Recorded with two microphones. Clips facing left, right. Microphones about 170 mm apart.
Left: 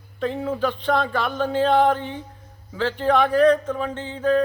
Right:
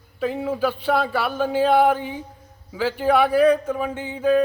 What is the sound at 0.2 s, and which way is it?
Speech, 5° right (ahead or behind).